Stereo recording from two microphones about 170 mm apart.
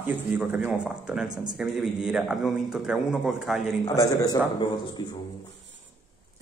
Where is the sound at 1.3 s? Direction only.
25° right (ahead or behind).